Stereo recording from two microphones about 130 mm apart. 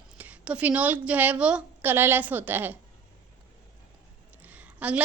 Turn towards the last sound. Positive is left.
turn(degrees=-10)  # may be behind; listen again after turning